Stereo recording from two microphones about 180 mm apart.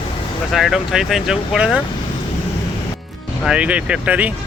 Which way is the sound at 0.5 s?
Centre (ahead or behind).